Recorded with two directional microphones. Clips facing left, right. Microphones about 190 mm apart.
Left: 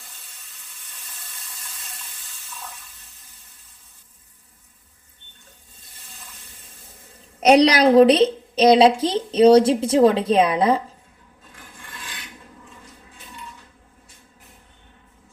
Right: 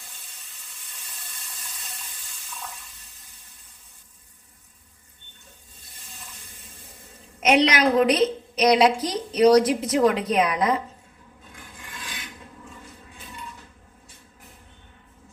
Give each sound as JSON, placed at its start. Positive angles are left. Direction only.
{"t": 7.4, "sound": "a woman's voice", "side_deg": 35}